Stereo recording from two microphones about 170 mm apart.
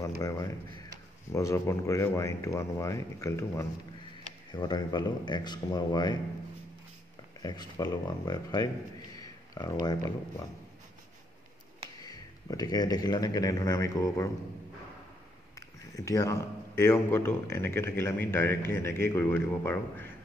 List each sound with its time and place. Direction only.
0.2 s speech: 20° left (ahead or behind)
7.4 s speech: 25° left (ahead or behind)
9.1 s a sound: 20° left (ahead or behind)
12.0 s speech: 20° left (ahead or behind)
15.8 s speech: 20° left (ahead or behind)